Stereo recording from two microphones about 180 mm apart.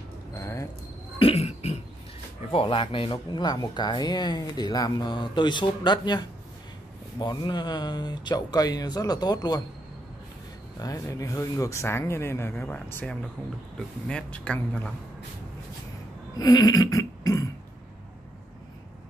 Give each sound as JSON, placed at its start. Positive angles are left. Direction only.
{"t": 0.4, "sound": "a sound", "side_deg": 15}
{"t": 1.2, "sound": "cough", "side_deg": 35}
{"t": 2.5, "sound": "speech", "side_deg": 30}
{"t": 10.8, "sound": "speech", "side_deg": 20}
{"t": 16.3, "sound": "burping", "side_deg": 20}